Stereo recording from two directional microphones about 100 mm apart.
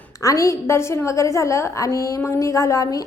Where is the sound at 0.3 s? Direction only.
30° left (ahead or behind).